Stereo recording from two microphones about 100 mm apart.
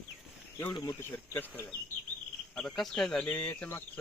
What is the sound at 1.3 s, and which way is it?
Speech, 25° left (ahead or behind).